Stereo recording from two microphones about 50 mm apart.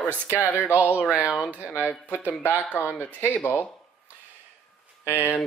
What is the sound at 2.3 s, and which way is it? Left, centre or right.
Speech, left.